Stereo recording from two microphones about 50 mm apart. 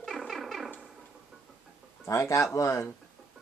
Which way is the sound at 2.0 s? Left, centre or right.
Left.